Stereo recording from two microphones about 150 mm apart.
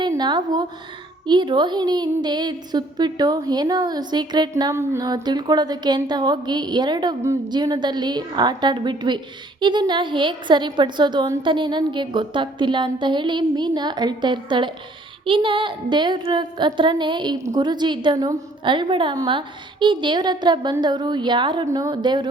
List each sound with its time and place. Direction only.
0.0 s a woman's voice: 30° right (ahead or behind)